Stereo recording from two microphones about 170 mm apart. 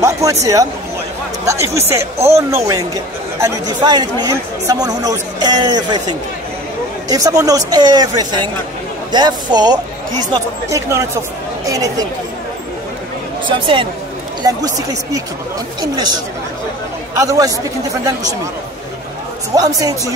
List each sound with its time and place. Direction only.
0.0 s speech: 20° right (ahead or behind)
7.1 s speech: 20° right (ahead or behind)
13.5 s speech: 30° right (ahead or behind)
19.5 s speech: 20° right (ahead or behind)